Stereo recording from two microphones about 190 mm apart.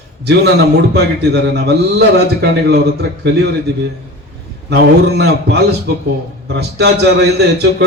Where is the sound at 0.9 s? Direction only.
60° right (ahead or behind).